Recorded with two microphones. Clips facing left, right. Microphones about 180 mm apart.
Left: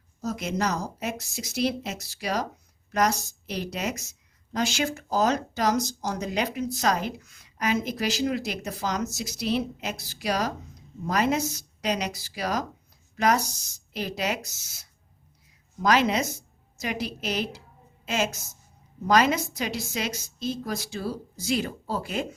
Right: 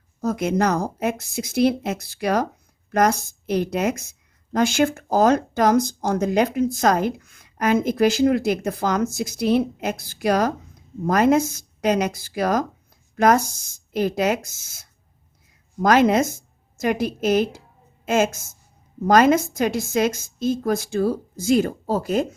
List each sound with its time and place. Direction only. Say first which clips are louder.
0.2 s speech: right 7 dB; 55° right (ahead or behind)